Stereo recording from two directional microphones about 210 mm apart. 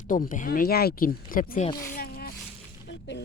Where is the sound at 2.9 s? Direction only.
55° left (ahead or behind).